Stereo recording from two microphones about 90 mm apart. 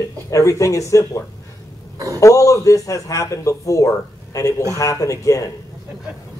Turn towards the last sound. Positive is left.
turn(degrees=35)  # may be behind; listen again after turning